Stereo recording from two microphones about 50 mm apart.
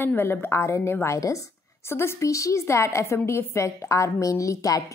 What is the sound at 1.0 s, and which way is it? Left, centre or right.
Speech, left.